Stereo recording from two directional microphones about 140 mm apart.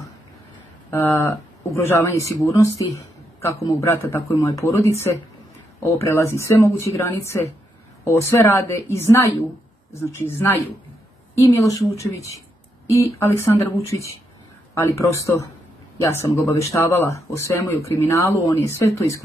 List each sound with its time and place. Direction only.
0.8 s a woman's voice: 20° left (ahead or behind)